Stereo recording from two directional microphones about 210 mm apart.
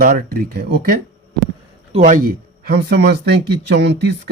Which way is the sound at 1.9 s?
35° right (ahead or behind).